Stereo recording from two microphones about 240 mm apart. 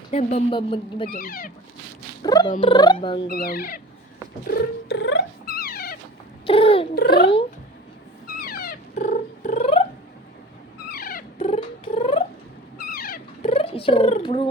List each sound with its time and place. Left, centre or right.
0.1 s speech: left
1.1 s speech: left
2.2 s speech: centre
3.2 s speech: left
4.9 s cat: left
6.4 s cat: left
6.9 s speech: left
8.4 s cat: left
10.9 s a sound: left
11.3 s cat: left
12.8 s a sound: left
13.5 s cat: left